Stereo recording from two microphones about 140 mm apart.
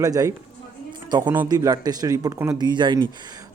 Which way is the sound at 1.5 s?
25° right (ahead or behind).